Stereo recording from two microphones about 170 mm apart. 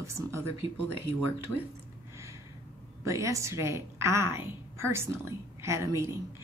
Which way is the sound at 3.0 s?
20° right (ahead or behind).